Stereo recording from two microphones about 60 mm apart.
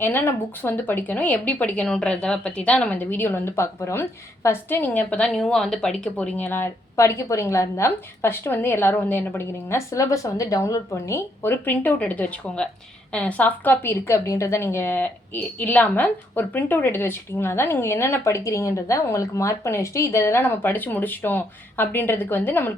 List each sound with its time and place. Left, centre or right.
0.0 s speech: left
4.7 s speech: left
5.1 s speech: centre
6.3 s speech: left
6.9 s a woman's voice: left
11.4 s speech: left
14.3 s a woman's voice: left
15.0 s speech: left